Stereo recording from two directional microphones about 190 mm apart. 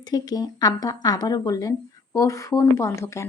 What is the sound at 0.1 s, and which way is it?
Speech, 20° left (ahead or behind).